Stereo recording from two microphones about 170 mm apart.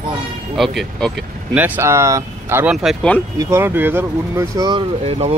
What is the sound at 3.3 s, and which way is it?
Speech, 15° right (ahead or behind).